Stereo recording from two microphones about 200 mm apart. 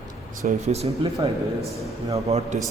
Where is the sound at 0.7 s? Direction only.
30° right (ahead or behind).